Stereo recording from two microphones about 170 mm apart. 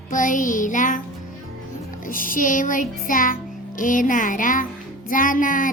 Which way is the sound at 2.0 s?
55° left (ahead or behind).